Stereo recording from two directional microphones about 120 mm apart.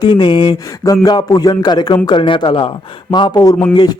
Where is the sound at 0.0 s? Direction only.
40° left (ahead or behind).